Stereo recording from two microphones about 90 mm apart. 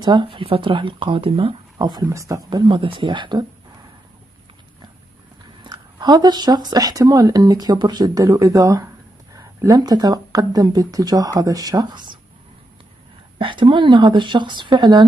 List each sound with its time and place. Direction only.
0.0 s speech: 65° right (ahead or behind); by 1.6 s 90° right
1.8 s speech: 50° right (ahead or behind)
2.0 s speech: 35° right (ahead or behind)
2.7 s speech: 70° right (ahead or behind)
5.6 s speech: 55° right (ahead or behind)
13.4 s speech: 65° right (ahead or behind)